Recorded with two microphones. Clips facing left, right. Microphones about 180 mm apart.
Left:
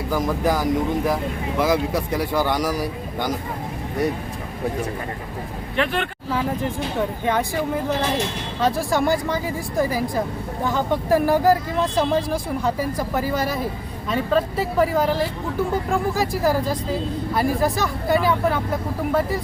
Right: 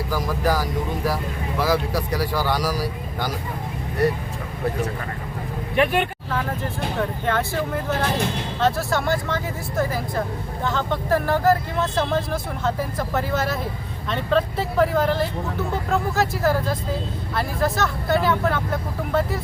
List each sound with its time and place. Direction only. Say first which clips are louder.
0.1 s speech: left 2 dB; 20° left (ahead or behind)
5.7 s speech: right 3 dB; 15° right (ahead or behind)
7.0 s speech: left 1 dB; 15° left (ahead or behind)